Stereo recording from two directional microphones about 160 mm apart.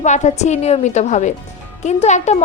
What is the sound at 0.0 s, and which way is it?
A woman's voice, 50° left (ahead or behind).